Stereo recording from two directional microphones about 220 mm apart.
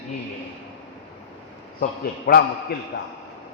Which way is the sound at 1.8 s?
45° left (ahead or behind).